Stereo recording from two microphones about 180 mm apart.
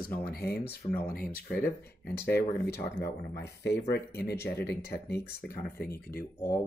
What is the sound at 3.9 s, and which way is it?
Speech, 60° left (ahead or behind).